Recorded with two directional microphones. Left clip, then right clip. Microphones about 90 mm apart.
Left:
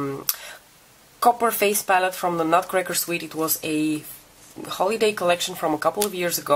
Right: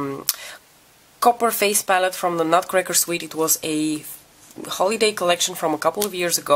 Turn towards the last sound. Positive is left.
turn(degrees=-30)  # may be behind; listen again after turning